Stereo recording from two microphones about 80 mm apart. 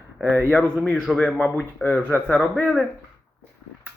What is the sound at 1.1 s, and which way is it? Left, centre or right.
Speech, centre.